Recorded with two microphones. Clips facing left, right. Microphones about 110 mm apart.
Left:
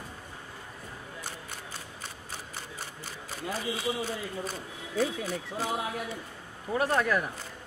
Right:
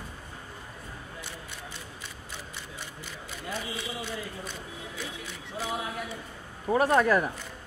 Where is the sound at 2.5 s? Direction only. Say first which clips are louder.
Left 1 dB; 40° left (ahead or behind).